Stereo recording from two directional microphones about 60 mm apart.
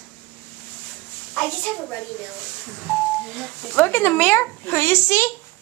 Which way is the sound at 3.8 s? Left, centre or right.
Left.